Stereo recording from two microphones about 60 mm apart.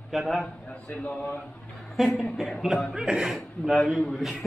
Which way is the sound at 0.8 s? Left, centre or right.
Left.